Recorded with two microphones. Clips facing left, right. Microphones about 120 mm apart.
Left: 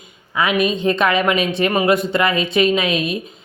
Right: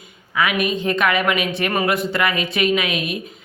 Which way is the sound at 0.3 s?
25° left (ahead or behind).